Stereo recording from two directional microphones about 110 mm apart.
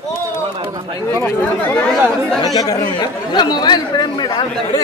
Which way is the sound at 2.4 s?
35° left (ahead or behind).